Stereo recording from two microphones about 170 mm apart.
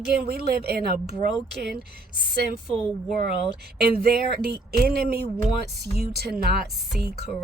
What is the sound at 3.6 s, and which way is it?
A woman's voice, 65° right (ahead or behind).